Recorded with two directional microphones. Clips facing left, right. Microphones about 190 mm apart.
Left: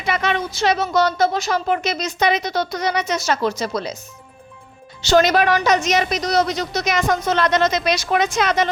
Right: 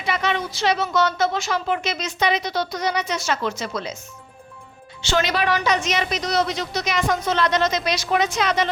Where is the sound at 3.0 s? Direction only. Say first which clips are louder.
Left 4 dB; 40° left (ahead or behind).